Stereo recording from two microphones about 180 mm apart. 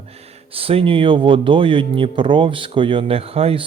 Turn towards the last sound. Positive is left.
turn(degrees=-35)  # may be behind; listen again after turning